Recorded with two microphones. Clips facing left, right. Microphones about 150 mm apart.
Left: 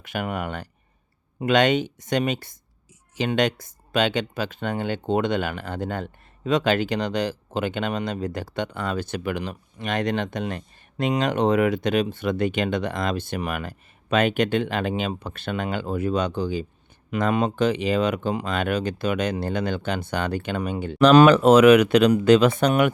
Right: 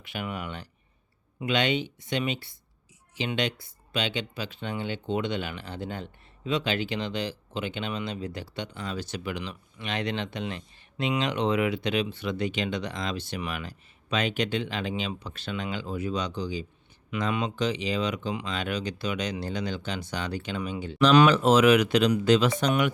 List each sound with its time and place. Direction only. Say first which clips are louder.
0.0 s speech: left 6 dB; 45° left (ahead or behind)